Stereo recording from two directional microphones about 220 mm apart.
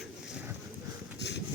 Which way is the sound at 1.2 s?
50° left (ahead or behind).